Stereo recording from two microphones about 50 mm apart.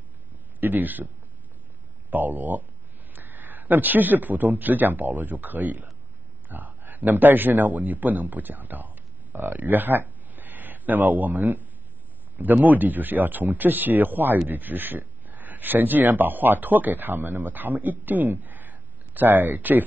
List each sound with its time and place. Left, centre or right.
0.6 s a man's voice: right